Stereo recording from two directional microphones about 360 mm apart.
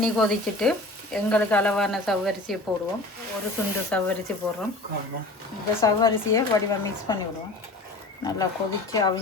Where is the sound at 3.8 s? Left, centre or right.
Centre.